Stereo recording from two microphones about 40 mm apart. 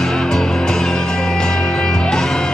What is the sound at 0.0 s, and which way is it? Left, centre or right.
Music, centre.